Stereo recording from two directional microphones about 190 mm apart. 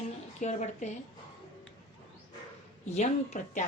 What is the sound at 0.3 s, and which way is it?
Speech, 40° left (ahead or behind).